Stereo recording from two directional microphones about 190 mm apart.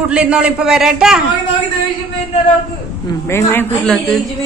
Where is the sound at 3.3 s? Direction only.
10° left (ahead or behind).